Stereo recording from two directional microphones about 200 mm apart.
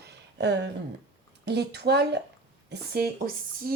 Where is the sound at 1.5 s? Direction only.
55° right (ahead or behind).